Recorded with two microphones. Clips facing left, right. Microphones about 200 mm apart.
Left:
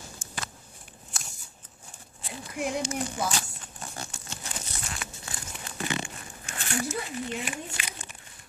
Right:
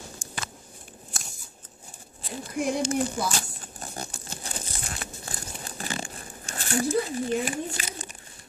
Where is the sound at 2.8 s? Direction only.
35° right (ahead or behind).